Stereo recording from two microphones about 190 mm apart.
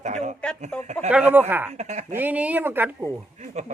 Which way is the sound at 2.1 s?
10° right (ahead or behind).